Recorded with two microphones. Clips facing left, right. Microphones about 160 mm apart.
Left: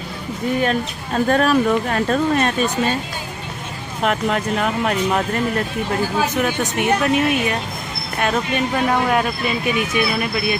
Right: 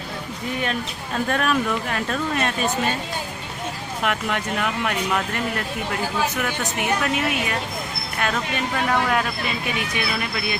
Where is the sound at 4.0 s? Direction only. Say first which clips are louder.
Left 5 dB; 35° left (ahead or behind).